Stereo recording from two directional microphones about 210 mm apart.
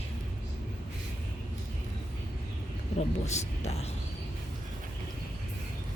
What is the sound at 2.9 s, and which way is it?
Speech, 30° left (ahead or behind).